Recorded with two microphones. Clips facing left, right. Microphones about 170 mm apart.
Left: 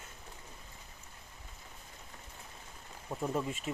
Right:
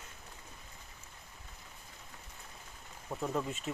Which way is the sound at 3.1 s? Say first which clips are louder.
Left 1 dB; 10° left (ahead or behind).